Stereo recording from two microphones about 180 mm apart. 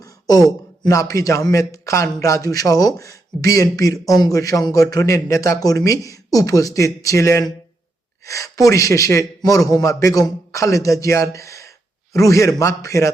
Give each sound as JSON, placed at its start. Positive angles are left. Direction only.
{"t": 0.0, "sound": "a man's voice", "side_deg": 20}